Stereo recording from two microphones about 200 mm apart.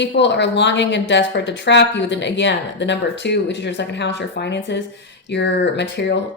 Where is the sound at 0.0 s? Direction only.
60° left (ahead or behind).